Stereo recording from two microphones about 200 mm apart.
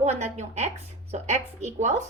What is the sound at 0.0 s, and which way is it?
A woman's voice, 35° right (ahead or behind).